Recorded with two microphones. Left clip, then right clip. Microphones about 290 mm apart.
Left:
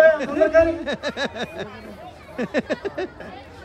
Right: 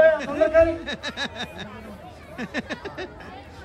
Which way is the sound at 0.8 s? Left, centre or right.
Centre.